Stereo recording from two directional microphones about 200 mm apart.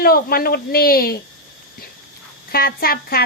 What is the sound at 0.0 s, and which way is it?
Speech, 50° left (ahead or behind).